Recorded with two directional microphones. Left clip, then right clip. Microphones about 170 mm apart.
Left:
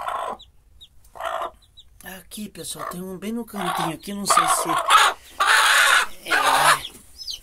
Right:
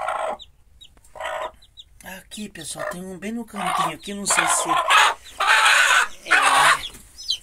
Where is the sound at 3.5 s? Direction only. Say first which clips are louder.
Right 3 dB; 35° left (ahead or behind).